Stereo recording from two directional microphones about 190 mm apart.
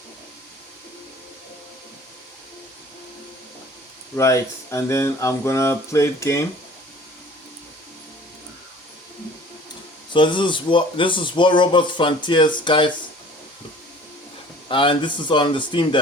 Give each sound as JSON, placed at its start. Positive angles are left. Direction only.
{"t": 4.1, "sound": "speech", "side_deg": 15}
{"t": 10.1, "sound": "speech", "side_deg": 25}
{"t": 14.7, "sound": "speech", "side_deg": 25}